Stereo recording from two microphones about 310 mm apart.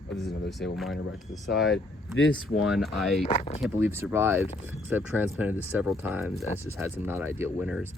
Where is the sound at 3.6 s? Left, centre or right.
Centre.